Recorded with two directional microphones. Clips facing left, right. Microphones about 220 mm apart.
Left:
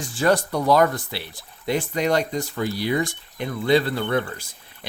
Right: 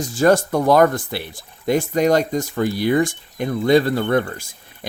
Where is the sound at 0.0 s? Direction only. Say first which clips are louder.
Right 5 dB; 45° right (ahead or behind).